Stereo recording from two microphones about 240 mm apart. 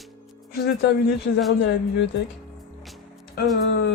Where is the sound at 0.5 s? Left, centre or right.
Left.